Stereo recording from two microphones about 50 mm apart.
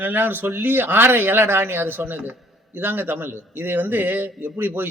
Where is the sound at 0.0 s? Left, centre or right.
Right.